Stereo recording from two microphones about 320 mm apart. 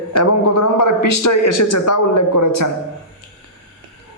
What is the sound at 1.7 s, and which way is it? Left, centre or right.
Speech, left.